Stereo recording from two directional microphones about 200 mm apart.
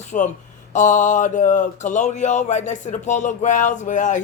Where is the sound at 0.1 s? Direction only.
35° left (ahead or behind).